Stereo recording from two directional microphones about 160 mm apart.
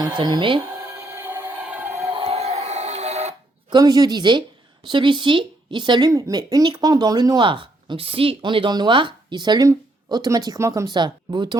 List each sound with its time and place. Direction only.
0.2 s a woman's voice: 30° right (ahead or behind)
0.9 s a sound: 15° right (ahead or behind)
2.1 s music: 40° right (ahead or behind)
3.7 s a woman's voice: 25° right (ahead or behind)